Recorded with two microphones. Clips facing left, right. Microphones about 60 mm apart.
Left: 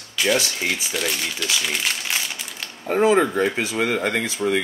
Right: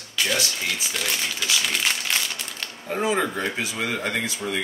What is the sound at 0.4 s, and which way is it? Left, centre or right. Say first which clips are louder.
Speech: left 3 dB; left.